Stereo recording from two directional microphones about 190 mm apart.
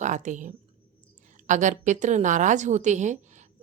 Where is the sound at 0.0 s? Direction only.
40° right (ahead or behind).